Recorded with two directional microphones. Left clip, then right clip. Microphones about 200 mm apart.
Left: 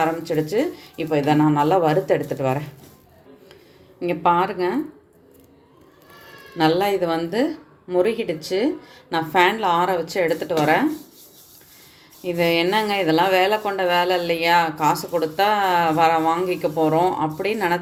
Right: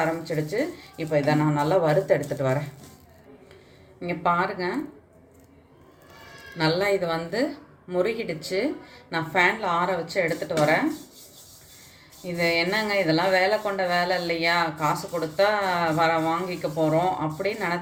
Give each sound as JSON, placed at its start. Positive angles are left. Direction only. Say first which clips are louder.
{"t": 0.0, "sound": "speech", "louder": "left 5 dB", "side_deg": 40}
{"t": 4.0, "sound": "speech", "louder": "left 5 dB", "side_deg": 35}
{"t": 6.6, "sound": "speech", "louder": "left 4 dB", "side_deg": 30}
{"t": 12.4, "sound": "speech", "louder": "left 4 dB", "side_deg": 45}